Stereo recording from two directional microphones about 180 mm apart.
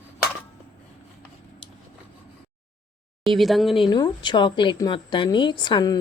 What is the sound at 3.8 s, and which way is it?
A woman's voice, 25° left (ahead or behind).